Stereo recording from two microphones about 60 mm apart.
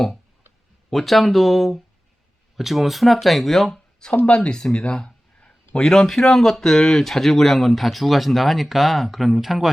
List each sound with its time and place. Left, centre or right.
0.9 s a man's voice: centre
4.3 s a man's voice: centre